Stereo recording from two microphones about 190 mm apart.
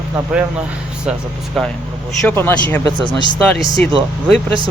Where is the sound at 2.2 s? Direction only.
10° left (ahead or behind).